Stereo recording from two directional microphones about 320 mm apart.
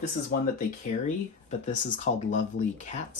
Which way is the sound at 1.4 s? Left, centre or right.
Left.